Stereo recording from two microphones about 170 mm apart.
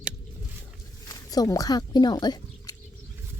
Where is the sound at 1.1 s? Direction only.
20° left (ahead or behind).